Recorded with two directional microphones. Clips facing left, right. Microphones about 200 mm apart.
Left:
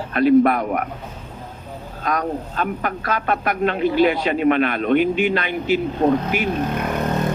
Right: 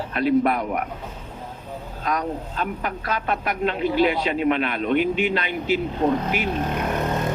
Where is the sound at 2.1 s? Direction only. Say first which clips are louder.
Left 3 dB; 50° left (ahead or behind).